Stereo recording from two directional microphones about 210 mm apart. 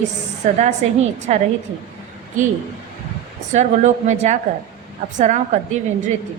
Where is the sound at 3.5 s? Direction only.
35° right (ahead or behind).